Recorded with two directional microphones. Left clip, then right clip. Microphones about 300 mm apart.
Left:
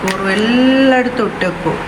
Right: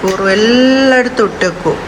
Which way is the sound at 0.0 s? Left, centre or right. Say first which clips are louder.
Right 5 dB; centre.